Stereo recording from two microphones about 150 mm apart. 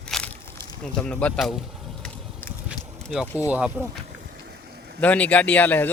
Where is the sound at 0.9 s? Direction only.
5° left (ahead or behind).